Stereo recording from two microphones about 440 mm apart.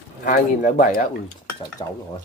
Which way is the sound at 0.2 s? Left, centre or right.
Centre.